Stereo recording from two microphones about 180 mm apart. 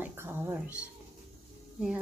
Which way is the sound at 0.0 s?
10° right (ahead or behind).